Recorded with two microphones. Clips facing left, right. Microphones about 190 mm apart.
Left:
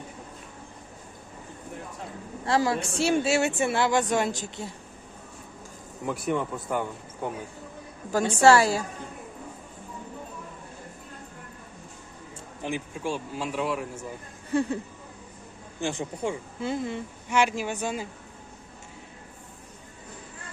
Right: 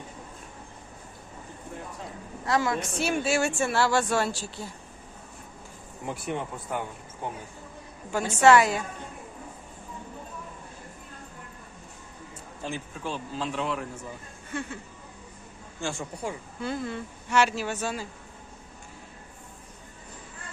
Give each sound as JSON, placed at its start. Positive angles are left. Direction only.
{"t": 2.4, "sound": "speech", "side_deg": 30}
{"t": 6.1, "sound": "speech", "side_deg": 50}
{"t": 8.2, "sound": "a woman's voice", "side_deg": 30}
{"t": 12.6, "sound": "a woman's voice", "side_deg": 15}
{"t": 14.5, "sound": "a woman's voice", "side_deg": 35}
{"t": 15.8, "sound": "a woman's voice", "side_deg": 20}